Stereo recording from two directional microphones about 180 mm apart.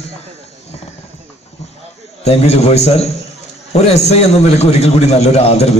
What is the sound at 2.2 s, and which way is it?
A man's voice, 35° left (ahead or behind).